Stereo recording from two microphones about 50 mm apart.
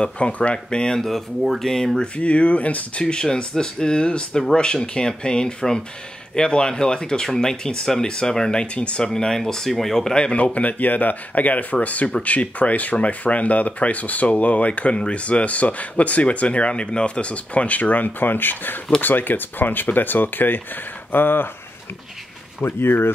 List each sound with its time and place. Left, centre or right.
0.0 s speech: left
2.1 s speech: left; by 10.1 s centre
10.1 s speech: left
22.6 s speech: left